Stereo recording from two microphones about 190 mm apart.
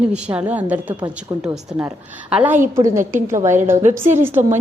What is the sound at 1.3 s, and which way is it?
Speech, 20° right (ahead or behind).